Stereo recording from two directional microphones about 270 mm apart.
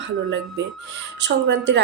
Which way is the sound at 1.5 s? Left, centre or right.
Right.